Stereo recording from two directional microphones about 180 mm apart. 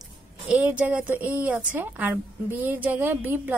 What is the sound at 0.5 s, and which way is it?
A woman's voice, 5° right (ahead or behind).